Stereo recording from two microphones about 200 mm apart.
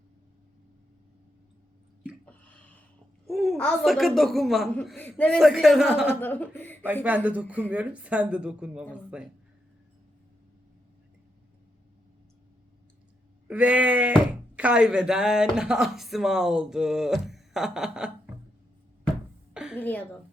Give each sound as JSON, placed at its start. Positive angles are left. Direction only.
{"t": 2.2, "sound": "a sound", "side_deg": 5}
{"t": 3.2, "sound": "a woman's voice", "side_deg": 0}
{"t": 6.1, "sound": "speech", "side_deg": 10}
{"t": 7.0, "sound": "speech", "side_deg": -10}
{"t": 13.5, "sound": "a woman's voice", "side_deg": -5}
{"t": 19.7, "sound": "speech", "side_deg": 10}